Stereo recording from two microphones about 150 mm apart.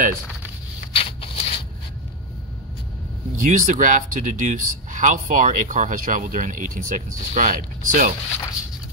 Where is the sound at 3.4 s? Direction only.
60° right (ahead or behind).